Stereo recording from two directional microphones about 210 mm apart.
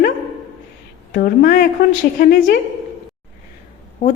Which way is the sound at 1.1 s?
45° left (ahead or behind).